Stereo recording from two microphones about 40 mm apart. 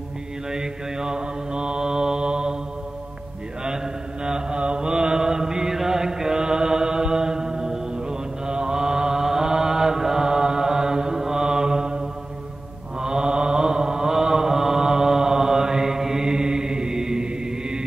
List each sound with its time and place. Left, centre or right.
0.5 s mantra: centre
3.6 s mantra: centre
13.0 s mantra: centre